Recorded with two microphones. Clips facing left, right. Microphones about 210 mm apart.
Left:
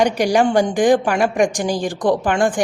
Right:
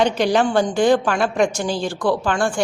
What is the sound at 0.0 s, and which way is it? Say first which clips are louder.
A woman's voice: left 2 dB; 15° left (ahead or behind).